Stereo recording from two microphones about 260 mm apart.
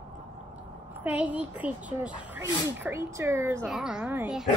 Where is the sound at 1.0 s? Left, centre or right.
Centre.